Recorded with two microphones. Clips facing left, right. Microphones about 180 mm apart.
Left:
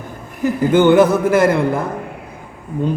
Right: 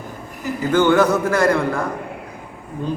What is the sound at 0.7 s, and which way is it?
A man's voice, 20° left (ahead or behind).